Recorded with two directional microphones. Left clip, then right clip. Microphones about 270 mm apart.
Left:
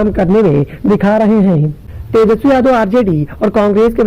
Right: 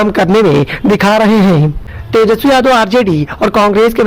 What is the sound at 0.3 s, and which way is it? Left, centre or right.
Speech, right.